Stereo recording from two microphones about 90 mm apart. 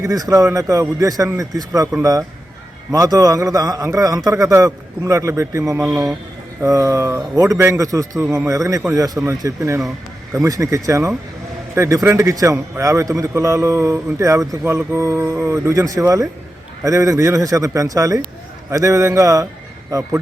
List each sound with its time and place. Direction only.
0.0 s a man's voice: 40° right (ahead or behind)
14.6 s a man's voice: 25° right (ahead or behind)